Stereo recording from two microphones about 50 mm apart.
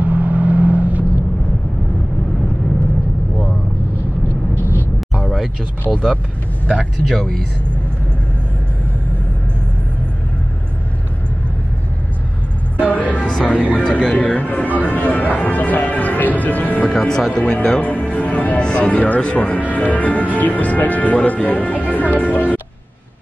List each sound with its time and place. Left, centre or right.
0.0 s vehicle: right
5.2 s a sound: centre
7.1 s speech: centre
12.7 s music: left
13.5 s speech: left
13.8 s music: centre
14.1 s music: left
17.3 s speech: left
18.6 s speech: left
22.2 s music: left